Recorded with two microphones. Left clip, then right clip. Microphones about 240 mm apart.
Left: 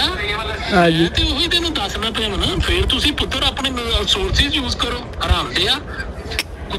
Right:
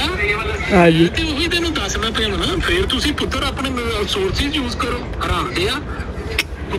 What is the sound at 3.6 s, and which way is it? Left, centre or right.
Speech, left.